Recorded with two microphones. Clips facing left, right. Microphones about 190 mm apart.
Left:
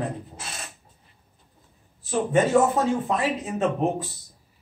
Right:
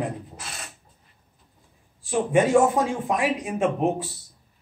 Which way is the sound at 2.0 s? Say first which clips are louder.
Right 1 dB; 10° right (ahead or behind).